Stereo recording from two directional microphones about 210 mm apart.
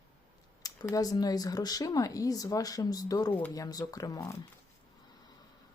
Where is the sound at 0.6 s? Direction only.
15° left (ahead or behind).